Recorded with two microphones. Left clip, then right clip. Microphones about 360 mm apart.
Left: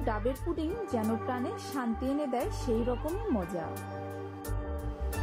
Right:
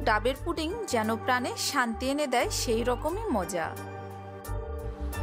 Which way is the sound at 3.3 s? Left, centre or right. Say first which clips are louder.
Right 4 dB; right.